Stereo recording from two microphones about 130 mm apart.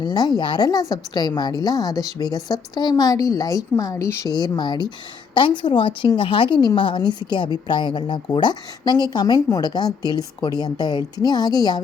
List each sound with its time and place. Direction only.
0.0 s a woman's voice: 30° left (ahead or behind)